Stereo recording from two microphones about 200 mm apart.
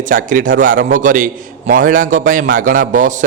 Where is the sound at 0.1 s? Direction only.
40° right (ahead or behind).